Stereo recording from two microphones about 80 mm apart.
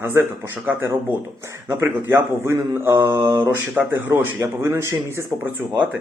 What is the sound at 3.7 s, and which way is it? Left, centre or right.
A man's voice, right.